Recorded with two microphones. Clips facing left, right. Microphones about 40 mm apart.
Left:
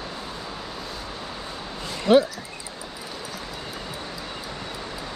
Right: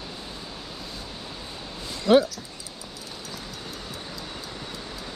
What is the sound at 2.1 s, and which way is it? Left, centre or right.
Speech, centre.